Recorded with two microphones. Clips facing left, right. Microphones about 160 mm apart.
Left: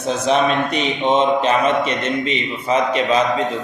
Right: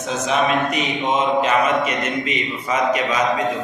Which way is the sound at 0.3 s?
30° left (ahead or behind).